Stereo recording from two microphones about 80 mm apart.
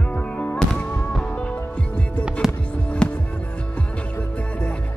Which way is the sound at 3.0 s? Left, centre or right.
Centre.